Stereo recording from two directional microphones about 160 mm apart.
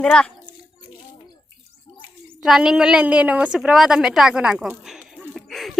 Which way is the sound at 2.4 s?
5° right (ahead or behind).